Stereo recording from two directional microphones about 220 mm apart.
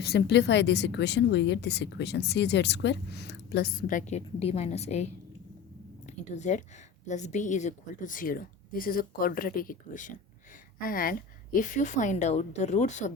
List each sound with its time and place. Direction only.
0.0 s speech: 45° left (ahead or behind); by 5.0 s 30° left (ahead or behind)
6.1 s a woman's voice: 30° left (ahead or behind)